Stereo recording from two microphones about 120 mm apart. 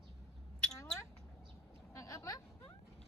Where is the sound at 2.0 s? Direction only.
25° left (ahead or behind).